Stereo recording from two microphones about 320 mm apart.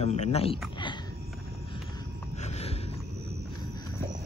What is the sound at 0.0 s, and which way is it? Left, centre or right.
Speech, centre.